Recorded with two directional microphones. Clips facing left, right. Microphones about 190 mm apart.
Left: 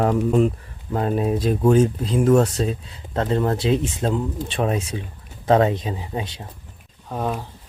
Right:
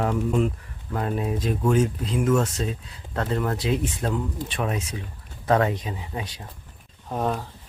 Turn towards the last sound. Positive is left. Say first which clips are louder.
# even
turn(degrees=0)  # may be behind; listen again after turning